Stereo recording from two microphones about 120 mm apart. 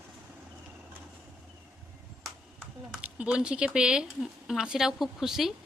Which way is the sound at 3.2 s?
10° right (ahead or behind).